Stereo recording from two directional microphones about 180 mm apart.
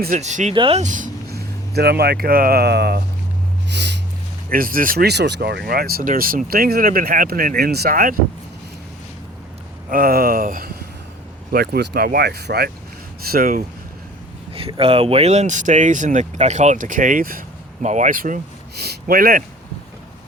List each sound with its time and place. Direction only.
0.2 s speech: 40° right (ahead or behind); by 3.0 s 65° right (ahead or behind)
3.7 s a sound: 75° right (ahead or behind)
4.4 s speech: 50° right (ahead or behind)
9.9 s speech: 55° right (ahead or behind)
11.5 s speech: 65° right (ahead or behind)
14.5 s speech: 30° right (ahead or behind); by 18.3 s 50° right (ahead or behind)
18.8 s speech: 60° right (ahead or behind)